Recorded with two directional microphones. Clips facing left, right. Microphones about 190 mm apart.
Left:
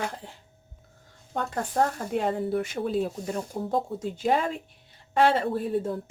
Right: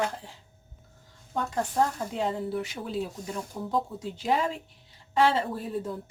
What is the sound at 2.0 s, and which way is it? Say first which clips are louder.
A woman's voice: left 3 dB; 55° left (ahead or behind).